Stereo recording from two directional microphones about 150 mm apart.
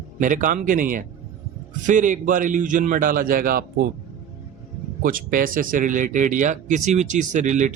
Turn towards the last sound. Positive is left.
turn(degrees=-55)  # may be behind; listen again after turning